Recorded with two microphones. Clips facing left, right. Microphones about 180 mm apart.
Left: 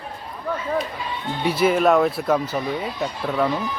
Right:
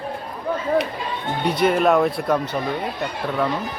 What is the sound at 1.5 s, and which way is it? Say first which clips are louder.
Speech: even; 5° left (ahead or behind).